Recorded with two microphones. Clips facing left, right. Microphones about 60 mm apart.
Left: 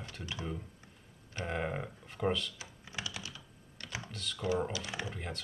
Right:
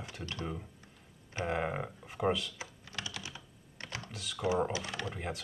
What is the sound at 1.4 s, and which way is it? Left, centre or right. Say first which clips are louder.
Speech: right 2 dB; centre.